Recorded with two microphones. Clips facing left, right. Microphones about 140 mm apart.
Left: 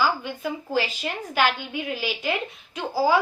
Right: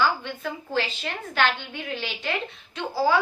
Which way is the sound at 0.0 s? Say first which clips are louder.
Even; 10° left (ahead or behind).